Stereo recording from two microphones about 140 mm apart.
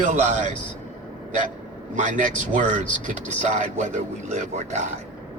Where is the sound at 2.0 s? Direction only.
65° right (ahead or behind).